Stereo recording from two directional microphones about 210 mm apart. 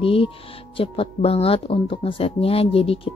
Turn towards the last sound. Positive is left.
turn(degrees=25)  # may be behind; listen again after turning